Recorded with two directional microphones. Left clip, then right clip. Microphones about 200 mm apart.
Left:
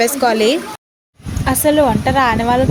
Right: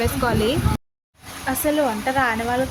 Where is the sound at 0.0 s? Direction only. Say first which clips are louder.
Left 8 dB; 15° left (ahead or behind).